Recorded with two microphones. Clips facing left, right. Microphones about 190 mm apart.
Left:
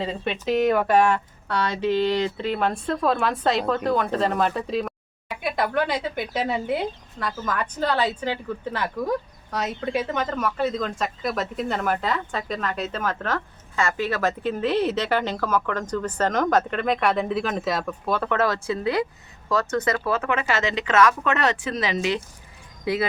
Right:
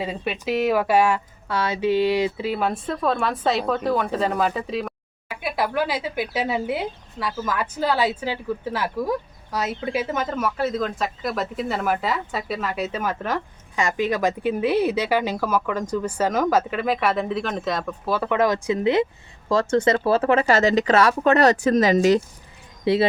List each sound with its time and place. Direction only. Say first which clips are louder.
0.0 s speech: even; 10° right (ahead or behind); by 22.2 s 40° right (ahead or behind)
22.8 s speech: right 5 dB; 25° right (ahead or behind)